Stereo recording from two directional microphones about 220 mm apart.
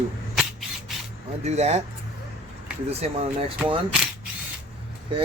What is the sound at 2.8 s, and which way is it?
Speech, 30° right (ahead or behind).